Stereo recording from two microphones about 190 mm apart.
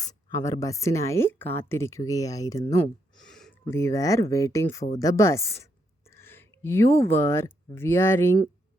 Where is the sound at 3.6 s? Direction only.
15° left (ahead or behind).